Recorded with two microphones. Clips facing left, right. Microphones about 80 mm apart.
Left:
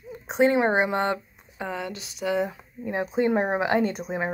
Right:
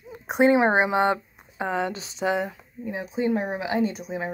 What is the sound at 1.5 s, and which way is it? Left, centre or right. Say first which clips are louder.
Speech: right 5 dB; right.